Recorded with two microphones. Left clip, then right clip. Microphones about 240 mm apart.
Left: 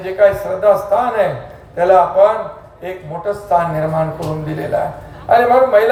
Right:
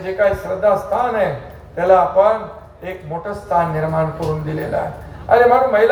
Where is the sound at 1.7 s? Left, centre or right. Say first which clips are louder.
Left 2 dB; left.